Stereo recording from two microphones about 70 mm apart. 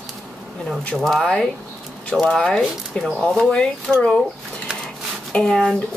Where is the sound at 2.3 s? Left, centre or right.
Centre.